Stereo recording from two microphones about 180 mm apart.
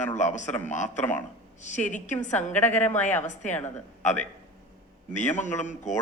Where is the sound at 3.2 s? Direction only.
40° left (ahead or behind).